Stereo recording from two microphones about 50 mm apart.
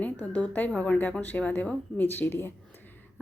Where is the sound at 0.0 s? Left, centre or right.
Left.